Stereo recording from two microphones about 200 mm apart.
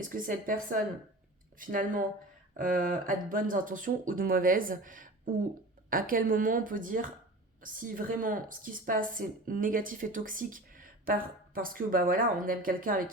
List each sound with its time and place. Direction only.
0.0 s speech: 45° right (ahead or behind)